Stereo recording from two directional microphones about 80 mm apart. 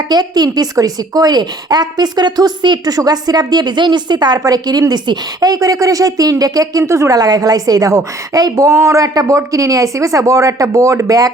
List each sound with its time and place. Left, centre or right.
0.1 s a woman's voice: right
7.2 s a woman's voice: right